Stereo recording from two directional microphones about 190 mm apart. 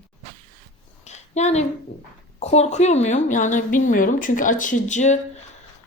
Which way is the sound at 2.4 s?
35° left (ahead or behind).